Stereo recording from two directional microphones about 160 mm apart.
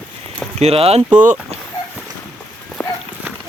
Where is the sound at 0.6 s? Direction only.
40° right (ahead or behind).